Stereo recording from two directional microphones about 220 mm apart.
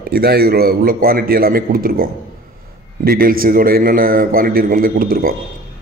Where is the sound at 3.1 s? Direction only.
40° right (ahead or behind).